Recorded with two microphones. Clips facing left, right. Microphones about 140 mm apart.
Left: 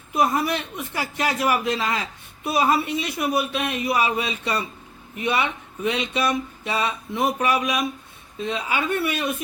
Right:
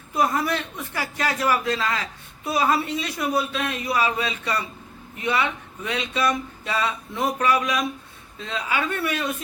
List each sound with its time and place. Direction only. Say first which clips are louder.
0.1 s a man's voice: left 1 dB; 20° left (ahead or behind)